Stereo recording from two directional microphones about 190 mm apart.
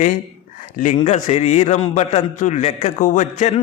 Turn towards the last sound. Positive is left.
turn(degrees=40)  # may be behind; listen again after turning